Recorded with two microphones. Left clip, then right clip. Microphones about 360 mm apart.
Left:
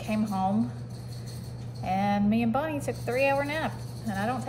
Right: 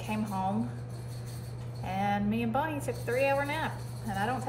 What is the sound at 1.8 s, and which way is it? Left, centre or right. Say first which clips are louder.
A woman's voice: left 4 dB; centre.